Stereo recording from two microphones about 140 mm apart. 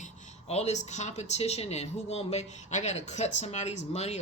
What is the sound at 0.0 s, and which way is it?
Speech, 50° left (ahead or behind).